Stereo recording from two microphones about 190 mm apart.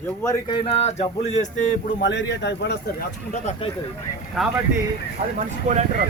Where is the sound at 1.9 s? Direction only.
70° left (ahead or behind).